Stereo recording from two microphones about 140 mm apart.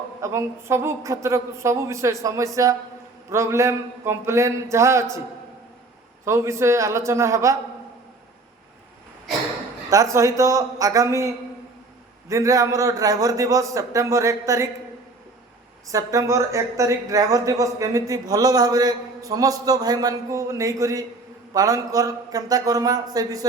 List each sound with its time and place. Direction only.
0.2 s a man's voice: 20° right (ahead or behind)
6.2 s a man's voice: 20° right (ahead or behind)
9.9 s a man's voice: 20° right (ahead or behind)
12.3 s a man's voice: 25° right (ahead or behind)
15.9 s a man's voice: 25° right (ahead or behind)